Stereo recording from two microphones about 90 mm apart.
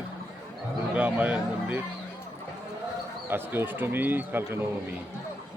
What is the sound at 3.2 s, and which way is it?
Speech, 25° right (ahead or behind).